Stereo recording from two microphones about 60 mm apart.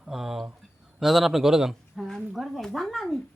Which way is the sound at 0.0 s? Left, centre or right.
Centre.